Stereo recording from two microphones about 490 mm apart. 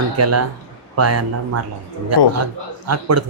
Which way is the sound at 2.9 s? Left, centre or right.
Right.